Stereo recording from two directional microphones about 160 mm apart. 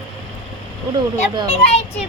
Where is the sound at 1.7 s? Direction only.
40° left (ahead or behind).